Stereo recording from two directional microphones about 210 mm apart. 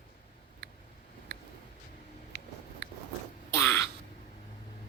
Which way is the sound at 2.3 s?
50° right (ahead or behind).